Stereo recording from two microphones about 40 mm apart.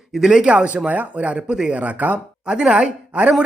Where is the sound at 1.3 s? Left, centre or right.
Right.